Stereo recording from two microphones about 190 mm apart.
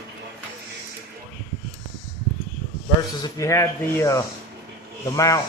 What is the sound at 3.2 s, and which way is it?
Speech, 15° left (ahead or behind).